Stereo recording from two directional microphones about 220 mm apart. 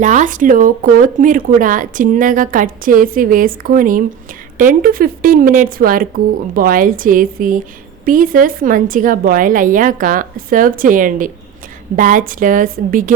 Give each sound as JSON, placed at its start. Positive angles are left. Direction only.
{"t": 0.0, "sound": "speech", "side_deg": -35}